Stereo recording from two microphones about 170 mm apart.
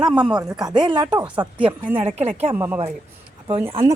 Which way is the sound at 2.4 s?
15° right (ahead or behind).